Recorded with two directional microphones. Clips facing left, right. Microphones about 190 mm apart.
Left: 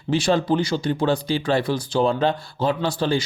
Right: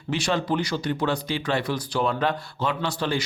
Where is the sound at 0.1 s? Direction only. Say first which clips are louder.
Left 5 dB; 35° left (ahead or behind).